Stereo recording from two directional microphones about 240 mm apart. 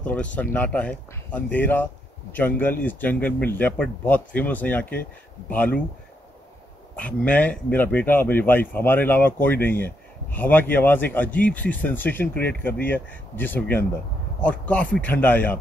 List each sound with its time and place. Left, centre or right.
0.0 s speech: centre
7.0 s speech: centre